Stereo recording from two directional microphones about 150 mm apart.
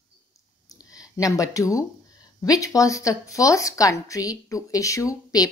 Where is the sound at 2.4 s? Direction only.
25° left (ahead or behind).